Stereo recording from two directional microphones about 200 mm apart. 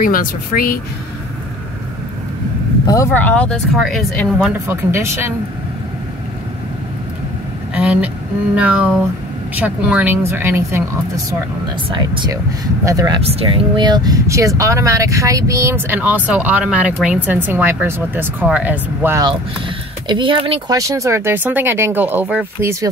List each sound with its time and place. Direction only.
0.0 s a woman's voice: 45° left (ahead or behind)
2.9 s speech: 10° left (ahead or behind)
4.6 s speech: 15° right (ahead or behind)
7.7 s vehicle: 5° right (ahead or behind)
8.5 s speech: 5° right (ahead or behind)
11.9 s speech: 25° right (ahead or behind)
13.2 s speech: 30° right (ahead or behind); by 19.2 s 10° right (ahead or behind)
20.1 s speech: 25° right (ahead or behind)
20.7 s speech: 15° right (ahead or behind)